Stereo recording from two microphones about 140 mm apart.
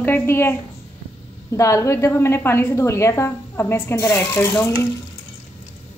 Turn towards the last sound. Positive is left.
turn(degrees=20)  # may be behind; listen again after turning